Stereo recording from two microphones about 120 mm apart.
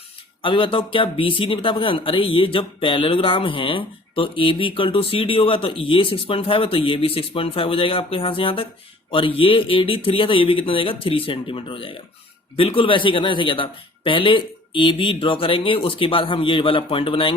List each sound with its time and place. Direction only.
0.4 s speech: 45° left (ahead or behind)